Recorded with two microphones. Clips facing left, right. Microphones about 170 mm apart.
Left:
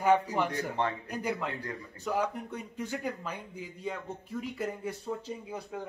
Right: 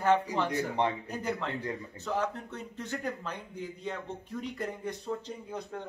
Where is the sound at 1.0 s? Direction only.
10° left (ahead or behind).